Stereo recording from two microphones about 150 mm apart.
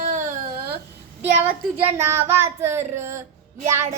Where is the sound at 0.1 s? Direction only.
60° right (ahead or behind).